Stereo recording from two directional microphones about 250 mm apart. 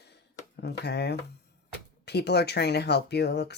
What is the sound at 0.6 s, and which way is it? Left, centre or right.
Speech, left.